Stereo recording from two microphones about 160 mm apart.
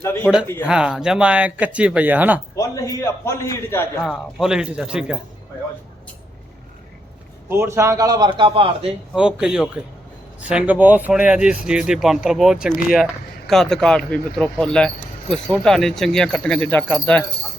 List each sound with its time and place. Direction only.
0.0 s speech: 15° left (ahead or behind)
0.7 s speech: 5° right (ahead or behind)
2.6 s a man's voice: 20° left (ahead or behind)
4.0 s speech: centre (ahead or behind)
7.5 s a man's voice: 15° right (ahead or behind); by 8.9 s 35° right (ahead or behind)
9.1 s speech: 5° right (ahead or behind)